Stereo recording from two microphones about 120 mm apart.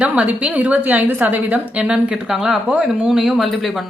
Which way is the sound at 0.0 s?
10° right (ahead or behind).